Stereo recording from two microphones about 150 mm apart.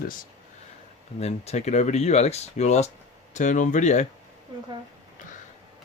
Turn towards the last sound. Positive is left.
turn(degrees=55)  # may be behind; listen again after turning